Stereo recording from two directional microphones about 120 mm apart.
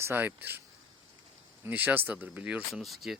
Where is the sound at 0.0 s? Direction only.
20° right (ahead or behind).